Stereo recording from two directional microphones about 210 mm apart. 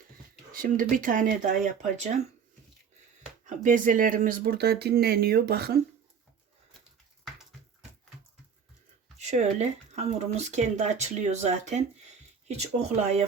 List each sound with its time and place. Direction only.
0.5 s speech: 40° right (ahead or behind)
3.4 s speech: 40° right (ahead or behind)
9.1 s speech: 35° right (ahead or behind)